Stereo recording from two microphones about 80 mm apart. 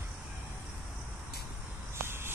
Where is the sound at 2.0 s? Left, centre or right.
Right.